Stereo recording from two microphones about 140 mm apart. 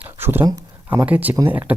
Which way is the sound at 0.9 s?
10° right (ahead or behind).